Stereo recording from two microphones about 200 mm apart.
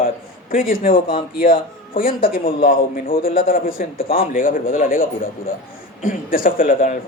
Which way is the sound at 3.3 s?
45° left (ahead or behind).